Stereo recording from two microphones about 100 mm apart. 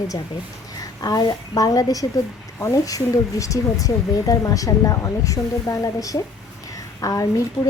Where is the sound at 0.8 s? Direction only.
40° left (ahead or behind).